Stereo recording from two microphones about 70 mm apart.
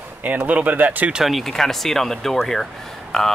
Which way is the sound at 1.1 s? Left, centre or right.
Centre.